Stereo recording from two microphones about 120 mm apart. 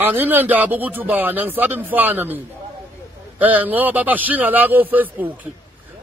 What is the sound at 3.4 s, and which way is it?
A man's voice, 15° right (ahead or behind).